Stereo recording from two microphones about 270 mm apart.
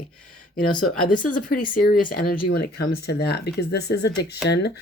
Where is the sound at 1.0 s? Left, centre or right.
Left.